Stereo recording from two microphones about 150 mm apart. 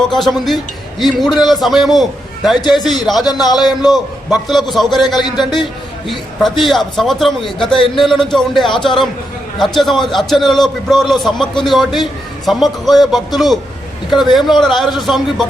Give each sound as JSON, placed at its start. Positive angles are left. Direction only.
{"t": 0.1, "sound": "a man's voice", "side_deg": 0}
{"t": 5.2, "sound": "a man's voice", "side_deg": 30}
{"t": 6.1, "sound": "a man's voice", "side_deg": 0}